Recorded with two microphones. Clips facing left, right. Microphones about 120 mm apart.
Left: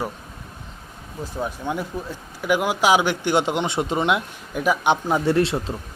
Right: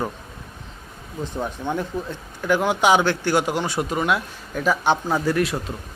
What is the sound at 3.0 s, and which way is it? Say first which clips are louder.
Speech: even; 15° left (ahead or behind).